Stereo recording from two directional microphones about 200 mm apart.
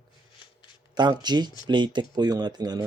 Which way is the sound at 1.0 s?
20° right (ahead or behind).